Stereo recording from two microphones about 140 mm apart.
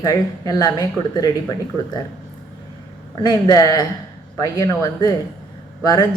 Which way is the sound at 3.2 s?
30° left (ahead or behind).